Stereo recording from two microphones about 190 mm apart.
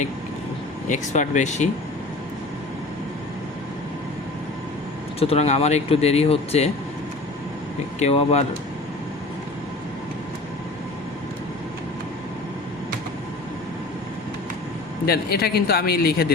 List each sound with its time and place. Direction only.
0.9 s speech: 40° left (ahead or behind)
5.2 s speech: 35° left (ahead or behind)
7.9 s speech: 35° left (ahead or behind)
15.0 s speech: 55° left (ahead or behind)